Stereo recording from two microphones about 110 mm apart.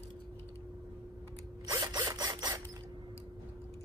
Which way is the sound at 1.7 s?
45° right (ahead or behind).